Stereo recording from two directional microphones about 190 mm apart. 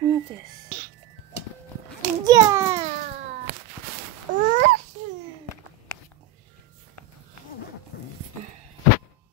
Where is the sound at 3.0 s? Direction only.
40° right (ahead or behind).